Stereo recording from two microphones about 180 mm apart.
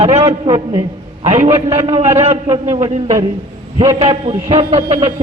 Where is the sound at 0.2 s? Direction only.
20° right (ahead or behind).